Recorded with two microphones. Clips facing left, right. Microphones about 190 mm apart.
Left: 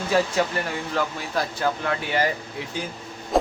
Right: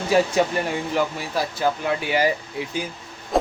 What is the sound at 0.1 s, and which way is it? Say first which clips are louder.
Speech: right 3 dB; 20° right (ahead or behind).